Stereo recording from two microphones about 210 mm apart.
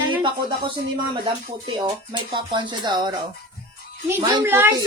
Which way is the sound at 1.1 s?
25° right (ahead or behind).